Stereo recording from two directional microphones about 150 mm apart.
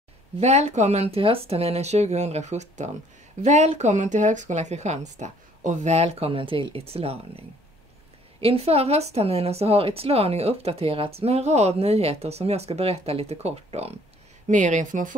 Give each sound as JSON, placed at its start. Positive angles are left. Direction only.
{"t": 0.4, "sound": "speech", "side_deg": -45}
{"t": 8.4, "sound": "speech", "side_deg": -40}
{"t": 14.5, "sound": "speech", "side_deg": -55}